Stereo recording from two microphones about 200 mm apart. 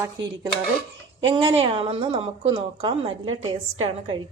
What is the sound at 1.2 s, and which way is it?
A woman's voice, 25° right (ahead or behind).